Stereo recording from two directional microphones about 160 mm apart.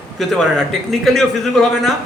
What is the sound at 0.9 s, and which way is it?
A man's voice, centre (ahead or behind).